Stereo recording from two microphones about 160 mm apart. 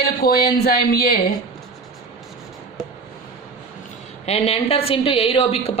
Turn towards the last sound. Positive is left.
turn(degrees=35)  # may be behind; listen again after turning